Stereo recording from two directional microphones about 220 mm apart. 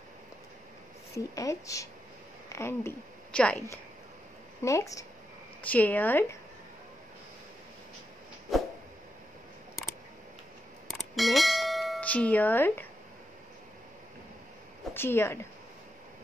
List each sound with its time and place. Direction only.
1.1 s speech: 15° left (ahead or behind)
4.6 s speech: 15° left (ahead or behind)
10.9 s bell: centre (ahead or behind)
15.0 s speech: 10° left (ahead or behind)